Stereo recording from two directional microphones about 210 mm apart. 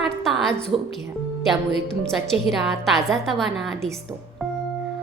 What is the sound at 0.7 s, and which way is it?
Speech, 25° right (ahead or behind).